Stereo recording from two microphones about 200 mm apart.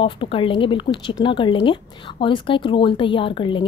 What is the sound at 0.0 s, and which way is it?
Speech, 25° left (ahead or behind).